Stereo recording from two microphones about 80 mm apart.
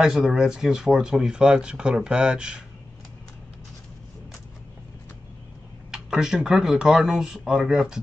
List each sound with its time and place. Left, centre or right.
0.0 s speech: centre
5.9 s speech: centre